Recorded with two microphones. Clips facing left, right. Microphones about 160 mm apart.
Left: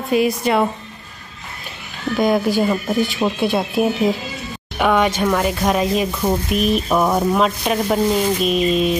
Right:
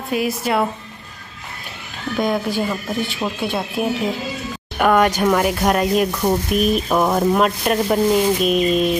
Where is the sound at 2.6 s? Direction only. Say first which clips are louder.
Left 4 dB; 20° left (ahead or behind).